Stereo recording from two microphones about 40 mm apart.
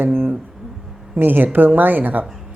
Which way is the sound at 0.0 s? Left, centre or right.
Right.